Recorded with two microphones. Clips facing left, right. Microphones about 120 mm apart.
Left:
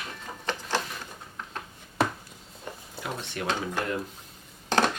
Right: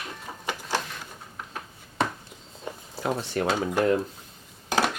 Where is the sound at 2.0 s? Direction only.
5° left (ahead or behind).